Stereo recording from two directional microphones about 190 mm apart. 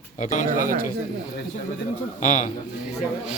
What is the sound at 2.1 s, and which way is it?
Speech, 40° left (ahead or behind).